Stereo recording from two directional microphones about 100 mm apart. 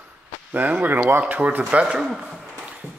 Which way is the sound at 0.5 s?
15° right (ahead or behind).